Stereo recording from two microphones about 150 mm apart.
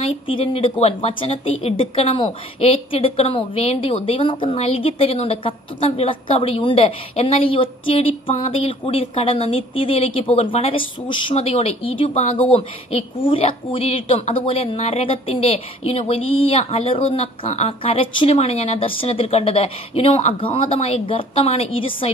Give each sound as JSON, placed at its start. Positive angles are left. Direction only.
{"t": 0.0, "sound": "speech", "side_deg": 35}
{"t": 11.3, "sound": "speech", "side_deg": 45}